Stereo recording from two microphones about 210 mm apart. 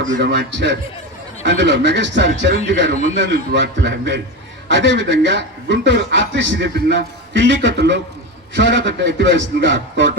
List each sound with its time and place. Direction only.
0.2 s a man's voice: 55° right (ahead or behind)